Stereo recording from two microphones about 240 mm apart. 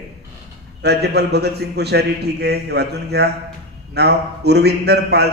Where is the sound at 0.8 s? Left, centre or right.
Right.